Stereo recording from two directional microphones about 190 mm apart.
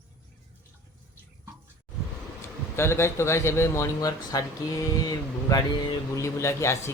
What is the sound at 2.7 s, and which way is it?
A man's voice, 15° left (ahead or behind).